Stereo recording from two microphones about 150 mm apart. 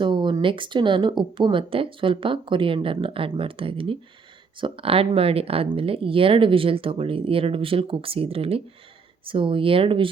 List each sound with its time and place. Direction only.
0.0 s speech: 30° right (ahead or behind)